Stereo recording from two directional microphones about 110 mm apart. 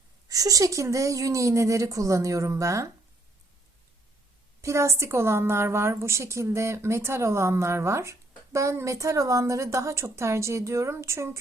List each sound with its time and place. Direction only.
0.3 s a woman's voice: 30° right (ahead or behind)
4.6 s a woman's voice: 25° right (ahead or behind)